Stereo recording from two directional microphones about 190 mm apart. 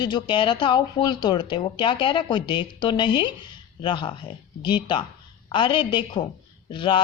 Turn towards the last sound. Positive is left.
turn(degrees=25)  # may be behind; listen again after turning